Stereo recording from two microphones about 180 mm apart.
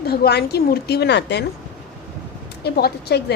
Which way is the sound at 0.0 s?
60° left (ahead or behind).